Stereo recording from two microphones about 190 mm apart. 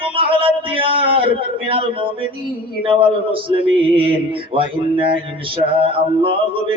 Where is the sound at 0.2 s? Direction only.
25° right (ahead or behind).